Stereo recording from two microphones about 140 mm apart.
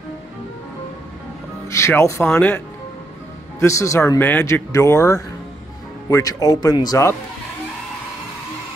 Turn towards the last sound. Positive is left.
turn(degrees=25)  # may be behind; listen again after turning